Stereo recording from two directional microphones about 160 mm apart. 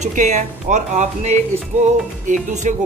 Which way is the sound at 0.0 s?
50° right (ahead or behind).